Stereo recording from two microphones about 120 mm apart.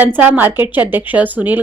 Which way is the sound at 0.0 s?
15° right (ahead or behind).